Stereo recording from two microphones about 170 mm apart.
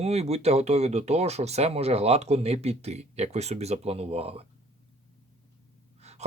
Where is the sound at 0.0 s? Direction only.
40° right (ahead or behind).